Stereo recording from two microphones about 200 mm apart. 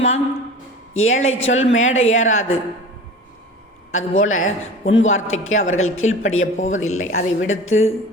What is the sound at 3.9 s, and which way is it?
A man's voice, 85° left.